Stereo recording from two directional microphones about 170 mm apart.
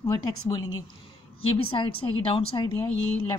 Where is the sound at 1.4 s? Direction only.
30° left (ahead or behind).